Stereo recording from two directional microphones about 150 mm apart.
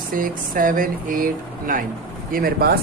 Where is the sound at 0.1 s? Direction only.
65° right (ahead or behind).